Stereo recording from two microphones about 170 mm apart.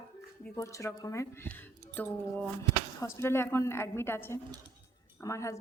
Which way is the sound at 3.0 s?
15° left (ahead or behind).